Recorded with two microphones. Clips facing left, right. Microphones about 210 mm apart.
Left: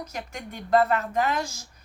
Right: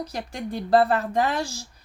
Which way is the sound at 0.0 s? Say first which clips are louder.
Right 5 dB; 35° right (ahead or behind).